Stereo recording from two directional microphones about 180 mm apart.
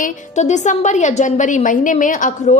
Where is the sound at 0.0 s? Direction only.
40° left (ahead or behind).